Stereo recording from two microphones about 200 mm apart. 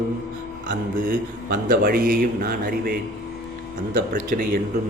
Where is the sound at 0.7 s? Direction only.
45° right (ahead or behind).